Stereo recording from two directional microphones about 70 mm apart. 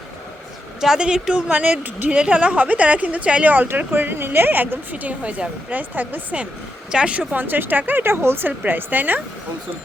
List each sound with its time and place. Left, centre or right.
0.8 s a woman's voice: centre
7.4 s a woman's voice: right